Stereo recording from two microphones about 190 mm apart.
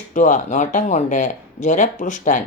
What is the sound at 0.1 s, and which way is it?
Speech, 40° left (ahead or behind).